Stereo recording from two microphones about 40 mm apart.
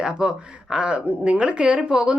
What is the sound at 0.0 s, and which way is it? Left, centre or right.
Speech, right.